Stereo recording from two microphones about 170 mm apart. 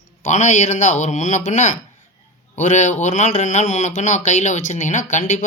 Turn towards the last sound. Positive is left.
turn(degrees=50)  # may be behind; listen again after turning